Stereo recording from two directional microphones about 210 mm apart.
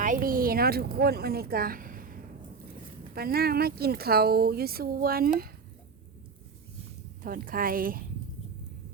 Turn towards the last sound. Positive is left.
turn(degrees=-45)  # may be behind; listen again after turning